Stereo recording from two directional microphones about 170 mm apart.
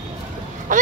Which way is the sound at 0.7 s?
50° right (ahead or behind).